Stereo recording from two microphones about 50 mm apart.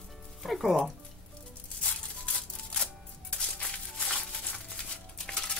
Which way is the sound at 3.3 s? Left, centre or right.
Left.